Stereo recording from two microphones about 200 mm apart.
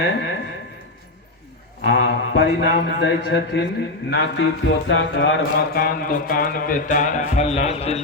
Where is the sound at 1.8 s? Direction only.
60° left (ahead or behind).